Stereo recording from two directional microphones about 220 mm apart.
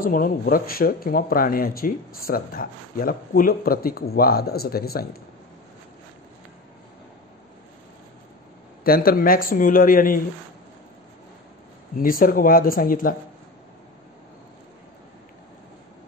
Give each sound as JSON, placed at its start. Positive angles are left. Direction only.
{"t": 0.0, "sound": "speech", "side_deg": 40}
{"t": 8.8, "sound": "speech", "side_deg": 40}
{"t": 12.0, "sound": "speech", "side_deg": 40}